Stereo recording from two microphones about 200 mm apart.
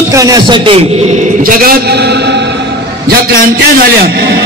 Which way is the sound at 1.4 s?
50° right (ahead or behind).